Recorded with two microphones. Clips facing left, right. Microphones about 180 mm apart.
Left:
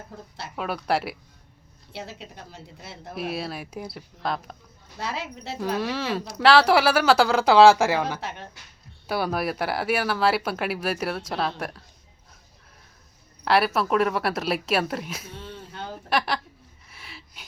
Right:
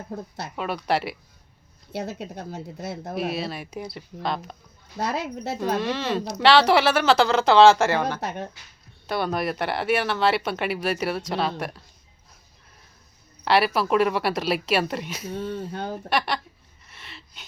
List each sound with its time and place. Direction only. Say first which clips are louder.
0.5 s speech: even; centre (ahead or behind)
1.9 s speech: right 7 dB; 45° right (ahead or behind)
3.2 s speech: right 1 dB; centre (ahead or behind)
4.9 s speech: right 5 dB; 45° right (ahead or behind)
5.7 s a woman's voice: even; 5° left (ahead or behind)
8.2 s speech: right 5 dB; 40° right (ahead or behind)
9.0 s speech: even; 5° left (ahead or behind)
13.4 s speech: right 1 dB; centre (ahead or behind)
15.3 s speech: right 10 dB; 50° right (ahead or behind)
16.0 s speech: left 1 dB; centre (ahead or behind)
16.9 s wheeze: even; 5° left (ahead or behind)